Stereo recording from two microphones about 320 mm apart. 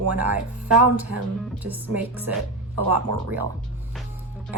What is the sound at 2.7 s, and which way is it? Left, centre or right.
Speech, right.